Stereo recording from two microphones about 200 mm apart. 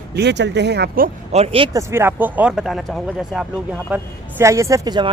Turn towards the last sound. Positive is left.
turn(degrees=-20)  # may be behind; listen again after turning